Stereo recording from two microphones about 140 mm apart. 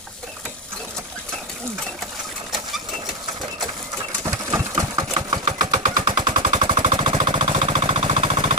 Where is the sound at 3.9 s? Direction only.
20° right (ahead or behind).